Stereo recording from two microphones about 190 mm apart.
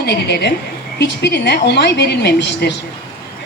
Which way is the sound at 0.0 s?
60° left (ahead or behind).